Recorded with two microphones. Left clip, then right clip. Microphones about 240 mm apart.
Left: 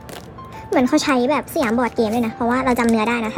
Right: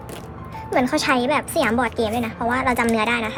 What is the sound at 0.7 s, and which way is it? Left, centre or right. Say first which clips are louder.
A woman's voice: left 2 dB; left.